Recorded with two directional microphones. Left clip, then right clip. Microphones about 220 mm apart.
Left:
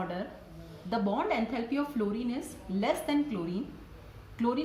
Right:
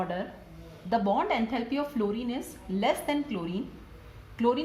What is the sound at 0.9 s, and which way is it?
Speech, 30° right (ahead or behind).